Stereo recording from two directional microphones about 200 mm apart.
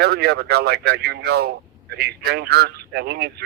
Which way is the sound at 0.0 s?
55° right (ahead or behind).